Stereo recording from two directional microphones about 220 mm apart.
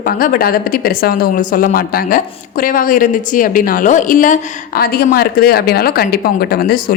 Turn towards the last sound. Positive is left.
turn(degrees=45)  # may be behind; listen again after turning